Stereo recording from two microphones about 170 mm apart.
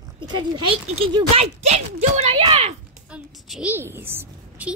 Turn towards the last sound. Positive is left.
turn(degrees=-15)  # may be behind; listen again after turning